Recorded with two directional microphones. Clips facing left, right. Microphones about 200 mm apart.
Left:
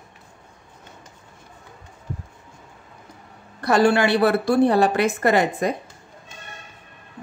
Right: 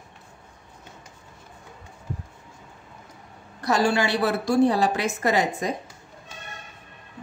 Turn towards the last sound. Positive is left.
turn(degrees=60)  # may be behind; listen again after turning